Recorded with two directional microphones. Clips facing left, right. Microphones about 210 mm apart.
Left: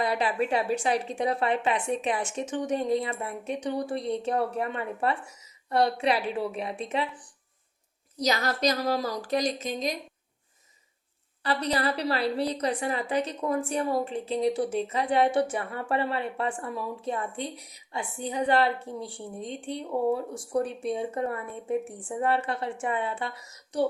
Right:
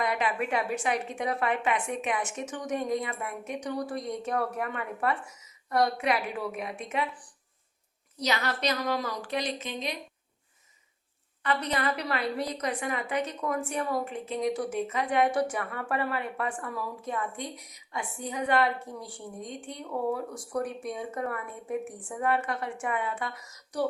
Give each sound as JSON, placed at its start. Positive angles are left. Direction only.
{"t": 0.0, "sound": "speech", "side_deg": 30}
{"t": 8.2, "sound": "a woman's voice", "side_deg": 40}
{"t": 11.4, "sound": "speech", "side_deg": 35}